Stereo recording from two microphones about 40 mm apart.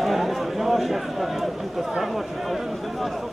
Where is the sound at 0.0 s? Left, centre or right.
Centre.